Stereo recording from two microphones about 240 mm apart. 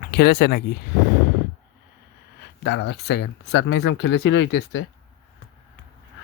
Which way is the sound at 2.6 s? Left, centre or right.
Left.